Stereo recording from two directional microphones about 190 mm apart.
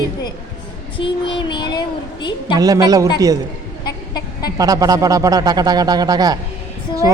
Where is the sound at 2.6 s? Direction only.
20° right (ahead or behind).